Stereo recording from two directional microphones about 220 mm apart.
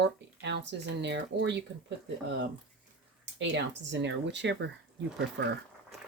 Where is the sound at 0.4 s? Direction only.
50° right (ahead or behind).